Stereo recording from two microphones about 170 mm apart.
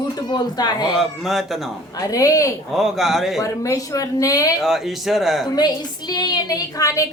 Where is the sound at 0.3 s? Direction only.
25° left (ahead or behind).